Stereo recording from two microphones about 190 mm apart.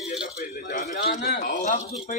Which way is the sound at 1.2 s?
55° left (ahead or behind).